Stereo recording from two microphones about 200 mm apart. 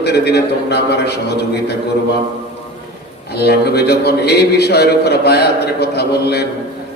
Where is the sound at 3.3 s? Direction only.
55° left (ahead or behind).